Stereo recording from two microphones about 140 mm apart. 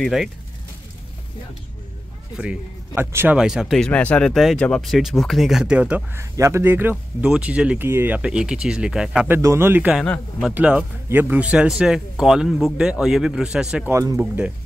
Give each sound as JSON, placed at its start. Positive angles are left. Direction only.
{"t": 0.0, "sound": "speech", "side_deg": 0}
{"t": 2.3, "sound": "speech", "side_deg": -10}
{"t": 3.3, "sound": "speech", "side_deg": -5}
{"t": 6.3, "sound": "speech", "side_deg": -20}
{"t": 9.3, "sound": "speech", "side_deg": -20}
{"t": 13.9, "sound": "speech", "side_deg": -20}
{"t": 14.2, "sound": "speech", "side_deg": -10}